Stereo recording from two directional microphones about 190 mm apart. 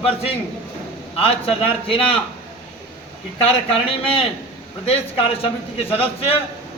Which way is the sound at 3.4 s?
30° left (ahead or behind).